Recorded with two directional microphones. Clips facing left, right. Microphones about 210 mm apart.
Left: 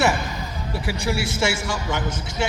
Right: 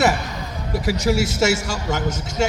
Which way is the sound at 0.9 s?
40° right (ahead or behind).